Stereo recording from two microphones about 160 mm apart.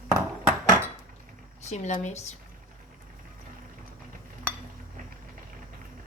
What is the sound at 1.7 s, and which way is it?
Speech, 45° left (ahead or behind).